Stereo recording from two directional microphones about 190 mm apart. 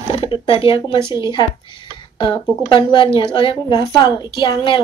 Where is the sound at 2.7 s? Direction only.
25° left (ahead or behind).